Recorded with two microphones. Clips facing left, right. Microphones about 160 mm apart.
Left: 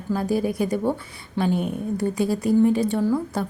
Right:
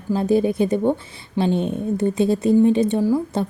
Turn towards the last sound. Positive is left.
turn(degrees=-15)  # may be behind; listen again after turning